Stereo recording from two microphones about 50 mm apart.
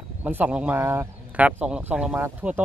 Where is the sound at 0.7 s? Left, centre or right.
Right.